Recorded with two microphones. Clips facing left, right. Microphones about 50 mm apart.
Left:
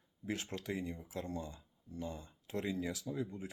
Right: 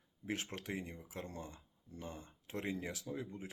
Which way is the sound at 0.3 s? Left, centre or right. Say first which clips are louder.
Left 2 dB; right.